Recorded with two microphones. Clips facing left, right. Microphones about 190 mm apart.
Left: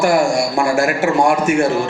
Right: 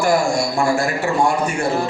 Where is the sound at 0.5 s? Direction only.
80° left.